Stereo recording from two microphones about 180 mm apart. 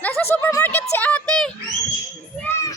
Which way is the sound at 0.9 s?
10° left (ahead or behind).